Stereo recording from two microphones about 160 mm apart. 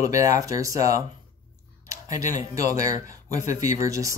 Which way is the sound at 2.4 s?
20° right (ahead or behind).